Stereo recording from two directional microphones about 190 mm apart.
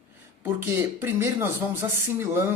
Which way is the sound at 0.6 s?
10° right (ahead or behind).